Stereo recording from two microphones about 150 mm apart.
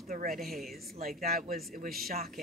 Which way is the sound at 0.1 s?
65° right (ahead or behind).